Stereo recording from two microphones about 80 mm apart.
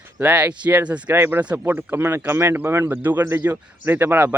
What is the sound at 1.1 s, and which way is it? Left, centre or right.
Speech, right.